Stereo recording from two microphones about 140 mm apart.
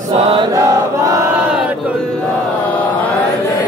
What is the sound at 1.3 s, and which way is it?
Battle cry, 5° right (ahead or behind).